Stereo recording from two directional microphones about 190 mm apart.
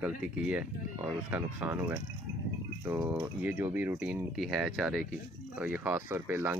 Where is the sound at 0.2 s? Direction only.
5° right (ahead or behind).